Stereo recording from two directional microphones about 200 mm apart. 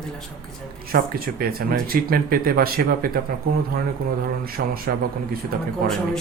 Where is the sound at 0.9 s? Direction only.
50° right (ahead or behind).